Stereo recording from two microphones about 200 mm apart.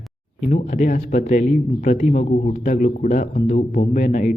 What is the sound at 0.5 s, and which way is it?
Speech, 40° left (ahead or behind).